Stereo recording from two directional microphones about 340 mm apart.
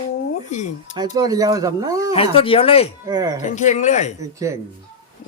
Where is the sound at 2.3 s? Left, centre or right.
Centre.